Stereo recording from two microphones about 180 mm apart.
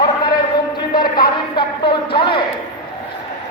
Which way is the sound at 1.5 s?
30° left (ahead or behind).